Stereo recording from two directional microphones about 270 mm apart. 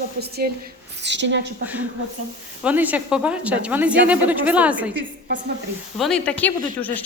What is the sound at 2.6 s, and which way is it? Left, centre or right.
A woman's voice, centre.